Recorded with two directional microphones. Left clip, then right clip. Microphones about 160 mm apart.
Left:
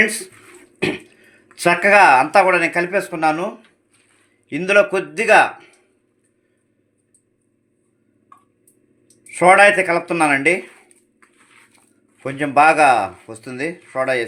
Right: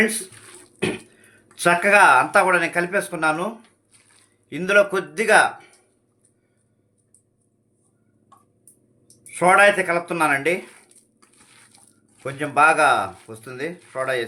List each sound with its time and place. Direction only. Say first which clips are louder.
0.8 s speech: left 4 dB; 20° left (ahead or behind)
9.3 s speech: left 4 dB; 30° left (ahead or behind)
12.2 s speech: left 4 dB; 30° left (ahead or behind)